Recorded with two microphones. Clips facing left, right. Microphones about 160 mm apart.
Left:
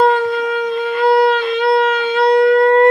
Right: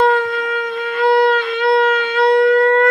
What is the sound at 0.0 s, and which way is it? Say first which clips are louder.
Shofar: left 2 dB; 25° left (ahead or behind).